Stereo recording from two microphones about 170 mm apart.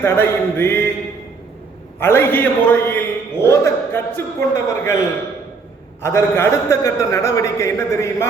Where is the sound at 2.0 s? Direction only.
15° left (ahead or behind).